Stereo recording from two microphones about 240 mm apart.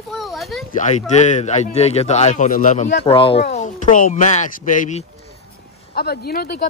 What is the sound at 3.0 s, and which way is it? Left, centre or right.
Speech, left.